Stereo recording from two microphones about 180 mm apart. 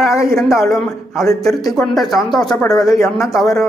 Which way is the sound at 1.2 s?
20° left (ahead or behind).